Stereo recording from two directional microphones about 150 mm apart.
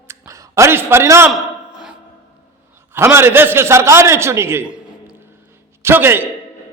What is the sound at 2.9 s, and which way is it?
A man's voice, 15° right (ahead or behind).